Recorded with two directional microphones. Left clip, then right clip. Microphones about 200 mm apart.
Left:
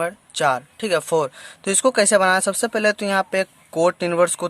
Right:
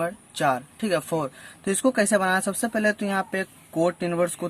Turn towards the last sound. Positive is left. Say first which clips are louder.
# left 6 dB
turn(degrees=35)  # may be behind; listen again after turning